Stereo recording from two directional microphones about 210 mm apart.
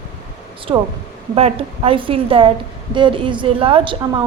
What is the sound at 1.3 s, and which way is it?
A woman's voice, 30° right (ahead or behind).